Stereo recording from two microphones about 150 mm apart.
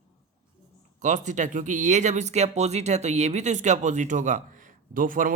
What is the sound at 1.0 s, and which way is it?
Speech, 55° right (ahead or behind).